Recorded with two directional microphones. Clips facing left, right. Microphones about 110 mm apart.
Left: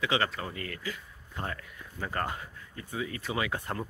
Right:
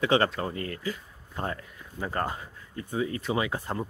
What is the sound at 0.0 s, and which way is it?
Speech, 35° right (ahead or behind).